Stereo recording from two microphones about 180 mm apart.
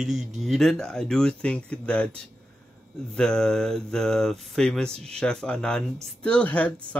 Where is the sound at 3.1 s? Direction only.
5° left (ahead or behind).